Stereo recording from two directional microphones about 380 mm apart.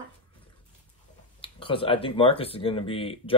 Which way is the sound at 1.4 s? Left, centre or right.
Centre.